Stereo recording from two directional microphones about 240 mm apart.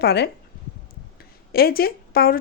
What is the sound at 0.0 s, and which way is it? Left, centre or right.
Speech, left.